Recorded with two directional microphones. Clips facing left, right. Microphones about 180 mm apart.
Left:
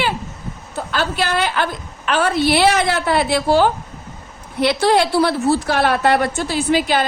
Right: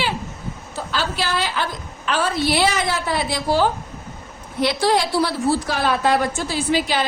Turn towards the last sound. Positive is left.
turn(degrees=55)  # may be behind; listen again after turning